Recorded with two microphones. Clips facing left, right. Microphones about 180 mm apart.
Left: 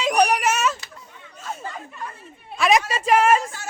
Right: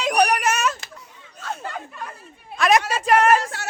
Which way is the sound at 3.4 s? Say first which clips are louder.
Right 2 dB; 75° right (ahead or behind).